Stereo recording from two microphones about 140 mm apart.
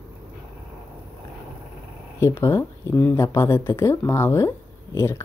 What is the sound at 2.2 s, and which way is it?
Speech, 20° left (ahead or behind).